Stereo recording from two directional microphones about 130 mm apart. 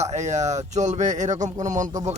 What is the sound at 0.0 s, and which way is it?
Speech, 65° right (ahead or behind).